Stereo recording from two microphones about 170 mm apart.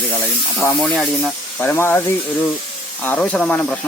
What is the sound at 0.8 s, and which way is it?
Speech, 5° left (ahead or behind).